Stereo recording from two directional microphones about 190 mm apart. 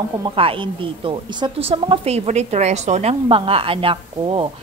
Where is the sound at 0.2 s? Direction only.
25° right (ahead or behind).